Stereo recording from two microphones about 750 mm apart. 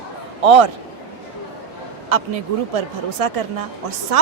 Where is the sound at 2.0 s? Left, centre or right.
Right.